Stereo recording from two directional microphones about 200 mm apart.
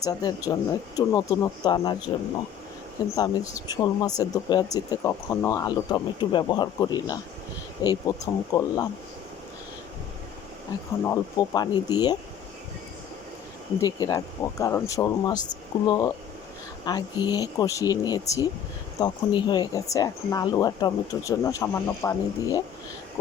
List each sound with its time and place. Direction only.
0.0 s speech: 20° left (ahead or behind)
3.2 s speech: 15° left (ahead or behind)
11.0 s speech: 15° left (ahead or behind)
13.8 s speech: 20° left (ahead or behind)